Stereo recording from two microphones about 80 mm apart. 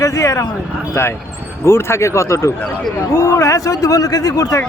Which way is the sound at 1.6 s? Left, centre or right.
Left.